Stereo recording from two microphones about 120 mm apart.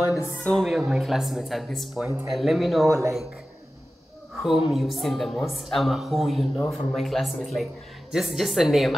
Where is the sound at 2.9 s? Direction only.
25° right (ahead or behind).